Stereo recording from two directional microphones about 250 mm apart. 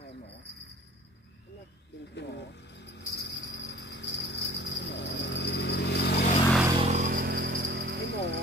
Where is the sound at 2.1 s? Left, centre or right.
Left.